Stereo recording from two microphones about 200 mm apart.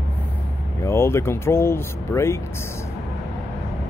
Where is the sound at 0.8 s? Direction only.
10° left (ahead or behind).